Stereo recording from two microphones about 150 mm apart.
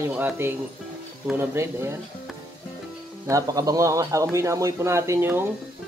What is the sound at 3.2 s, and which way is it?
Speech, 20° right (ahead or behind).